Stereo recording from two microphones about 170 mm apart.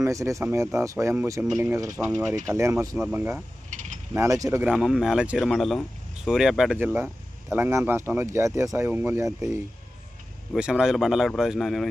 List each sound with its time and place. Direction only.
0.0 s speech: 20° right (ahead or behind)
4.6 s speech: 5° right (ahead or behind)
10.5 s speech: 5° right (ahead or behind)